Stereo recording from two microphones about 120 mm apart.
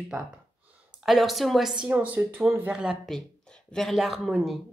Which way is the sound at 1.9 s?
15° right (ahead or behind).